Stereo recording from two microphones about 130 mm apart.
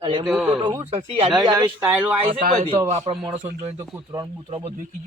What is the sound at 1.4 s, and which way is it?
Speech, 30° right (ahead or behind).